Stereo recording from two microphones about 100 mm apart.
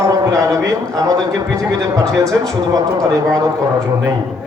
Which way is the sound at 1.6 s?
30° right (ahead or behind).